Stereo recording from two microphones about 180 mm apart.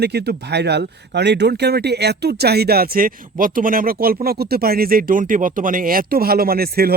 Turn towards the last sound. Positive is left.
turn(degrees=-55)  # may be behind; listen again after turning